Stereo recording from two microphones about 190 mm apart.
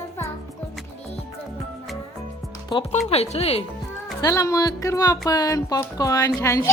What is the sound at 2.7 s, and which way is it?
Speech, 30° left (ahead or behind).